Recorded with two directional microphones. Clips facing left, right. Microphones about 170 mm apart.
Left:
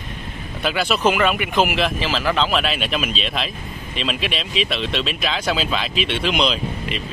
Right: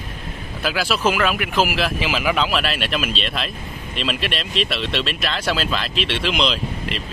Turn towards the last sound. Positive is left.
turn(degrees=0)  # may be behind; listen again after turning